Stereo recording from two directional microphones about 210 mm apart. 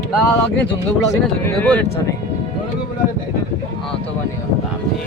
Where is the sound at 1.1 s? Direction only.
10° left (ahead or behind).